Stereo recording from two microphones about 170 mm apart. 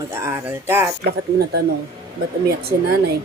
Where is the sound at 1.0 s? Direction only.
70° right (ahead or behind).